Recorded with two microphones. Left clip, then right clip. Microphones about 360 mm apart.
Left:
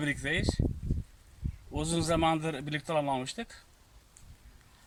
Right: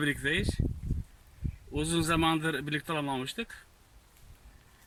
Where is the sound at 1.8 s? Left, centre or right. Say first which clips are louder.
Even; centre.